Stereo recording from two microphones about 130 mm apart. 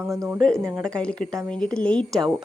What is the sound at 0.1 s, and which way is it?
Speech, 25° right (ahead or behind).